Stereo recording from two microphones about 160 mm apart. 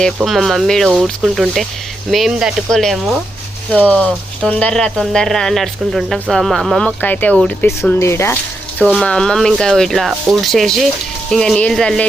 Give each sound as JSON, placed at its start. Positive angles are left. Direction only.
{"t": 0.2, "sound": "speech", "side_deg": 0}
{"t": 8.8, "sound": "speech", "side_deg": 0}